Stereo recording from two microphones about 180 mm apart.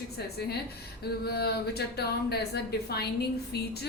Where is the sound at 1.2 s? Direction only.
60° left (ahead or behind).